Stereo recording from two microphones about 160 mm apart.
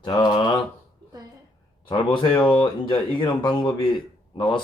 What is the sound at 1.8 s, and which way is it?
Speech, 30° left (ahead or behind).